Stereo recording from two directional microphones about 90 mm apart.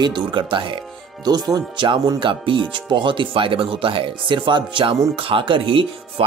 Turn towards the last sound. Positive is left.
turn(degrees=-80)